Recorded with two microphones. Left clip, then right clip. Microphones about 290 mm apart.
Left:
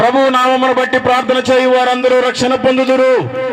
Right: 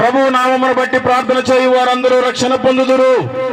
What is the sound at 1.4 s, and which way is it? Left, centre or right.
A man's voice, left.